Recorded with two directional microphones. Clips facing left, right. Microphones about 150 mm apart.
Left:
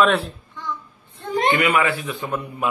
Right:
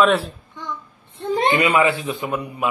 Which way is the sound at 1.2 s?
25° right (ahead or behind).